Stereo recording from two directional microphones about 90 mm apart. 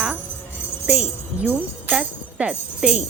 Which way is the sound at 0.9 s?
15° right (ahead or behind).